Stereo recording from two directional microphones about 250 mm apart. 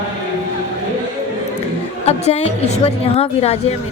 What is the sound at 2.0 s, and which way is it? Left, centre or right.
A woman's voice, left.